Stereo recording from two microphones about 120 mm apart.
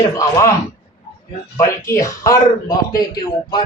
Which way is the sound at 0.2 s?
25° left (ahead or behind).